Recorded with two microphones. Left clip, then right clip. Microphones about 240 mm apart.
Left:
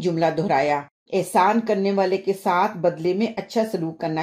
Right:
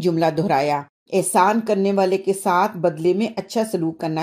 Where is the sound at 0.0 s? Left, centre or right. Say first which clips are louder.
Right 2 dB; right.